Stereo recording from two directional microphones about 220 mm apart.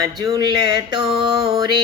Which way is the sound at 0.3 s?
15° right (ahead or behind).